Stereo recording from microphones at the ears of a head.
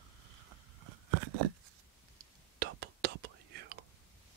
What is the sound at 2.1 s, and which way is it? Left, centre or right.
Whispering, right.